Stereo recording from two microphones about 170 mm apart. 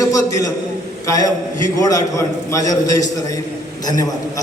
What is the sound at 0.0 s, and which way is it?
A man's voice, 20° left (ahead or behind).